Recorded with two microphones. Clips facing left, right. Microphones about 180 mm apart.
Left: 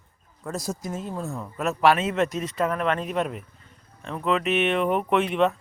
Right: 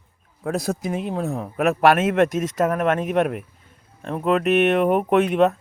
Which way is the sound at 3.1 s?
60° right (ahead or behind).